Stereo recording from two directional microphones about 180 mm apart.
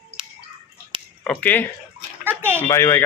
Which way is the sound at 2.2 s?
10° right (ahead or behind).